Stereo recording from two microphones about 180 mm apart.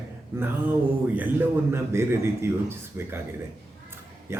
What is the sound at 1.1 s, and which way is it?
A man's voice, 10° right (ahead or behind).